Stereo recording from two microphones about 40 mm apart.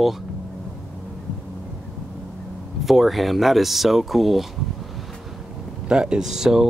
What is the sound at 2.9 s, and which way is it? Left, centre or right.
Speech, centre.